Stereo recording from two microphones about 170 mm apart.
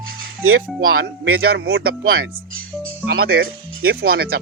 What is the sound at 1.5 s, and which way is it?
Speech, 65° right (ahead or behind).